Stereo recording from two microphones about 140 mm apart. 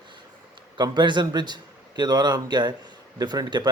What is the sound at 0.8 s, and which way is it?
Speech, 35° right (ahead or behind).